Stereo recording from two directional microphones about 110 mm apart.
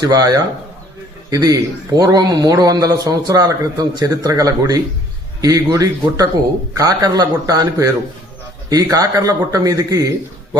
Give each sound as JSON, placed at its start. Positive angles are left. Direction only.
{"t": 0.0, "sound": "speech", "side_deg": -35}